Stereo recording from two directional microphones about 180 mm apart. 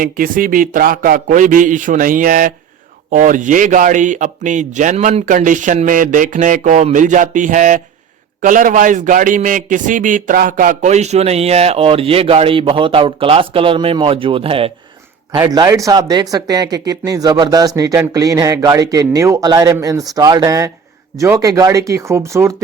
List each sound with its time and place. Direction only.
0.0 s a man's voice: 50° right (ahead or behind); by 14.7 s 30° right (ahead or behind)
15.3 s speech: 20° right (ahead or behind)